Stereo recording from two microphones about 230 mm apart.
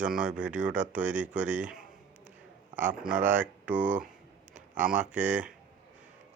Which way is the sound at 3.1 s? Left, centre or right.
Right.